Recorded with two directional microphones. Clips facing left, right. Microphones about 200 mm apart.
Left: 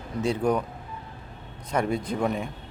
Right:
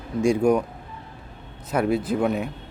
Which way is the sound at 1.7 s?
5° right (ahead or behind).